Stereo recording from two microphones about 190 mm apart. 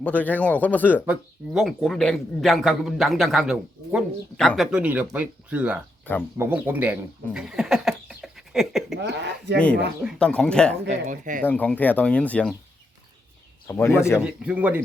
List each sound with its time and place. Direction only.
0.0 s speech: 10° left (ahead or behind)
1.0 s a man's voice: 5° right (ahead or behind)
9.0 s speech: 65° right (ahead or behind)
10.0 s a man's voice: 5° left (ahead or behind)
10.8 s speech: 40° right (ahead or behind)
11.4 s speech: 5° left (ahead or behind)
13.7 s speech: 15° left (ahead or behind)
14.2 s speech: 5° right (ahead or behind)